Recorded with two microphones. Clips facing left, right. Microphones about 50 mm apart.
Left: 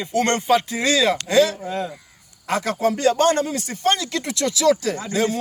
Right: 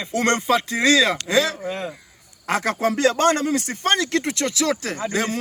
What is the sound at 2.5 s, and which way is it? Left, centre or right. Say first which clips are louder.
Speech: even; right.